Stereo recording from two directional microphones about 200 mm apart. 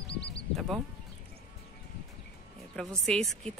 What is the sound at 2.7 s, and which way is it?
Speech, centre (ahead or behind).